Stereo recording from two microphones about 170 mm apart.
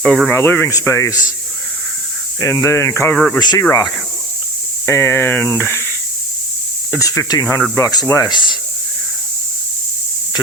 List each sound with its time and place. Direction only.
0.0 s speech: 5° left (ahead or behind); by 1.3 s 20° left (ahead or behind)
2.4 s speech: 15° left (ahead or behind)
7.0 s speech: 20° left (ahead or behind)